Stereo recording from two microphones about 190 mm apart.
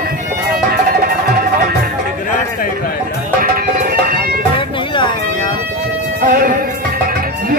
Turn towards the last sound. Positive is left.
turn(degrees=-45)  # may be behind; listen again after turning